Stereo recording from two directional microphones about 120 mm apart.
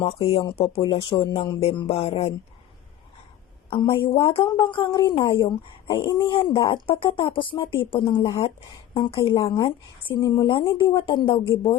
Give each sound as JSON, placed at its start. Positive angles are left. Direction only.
{"t": 0.0, "sound": "a woman's voice", "side_deg": 50}
{"t": 3.7, "sound": "a woman's voice", "side_deg": 45}
{"t": 9.6, "sound": "a woman's voice", "side_deg": 45}